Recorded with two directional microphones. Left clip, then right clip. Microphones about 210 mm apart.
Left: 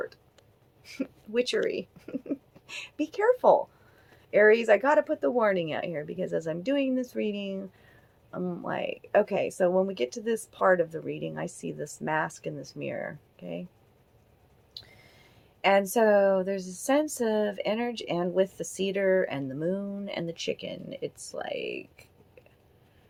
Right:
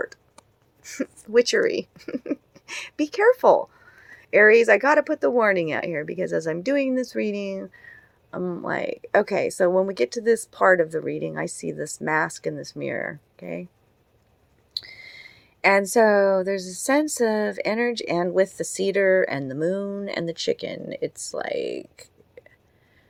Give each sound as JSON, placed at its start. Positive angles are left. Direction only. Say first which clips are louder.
{"t": 0.0, "sound": "speech", "louder": "right 6 dB", "side_deg": -40}
{"t": 14.7, "sound": "speech", "louder": "right 14 dB", "side_deg": -40}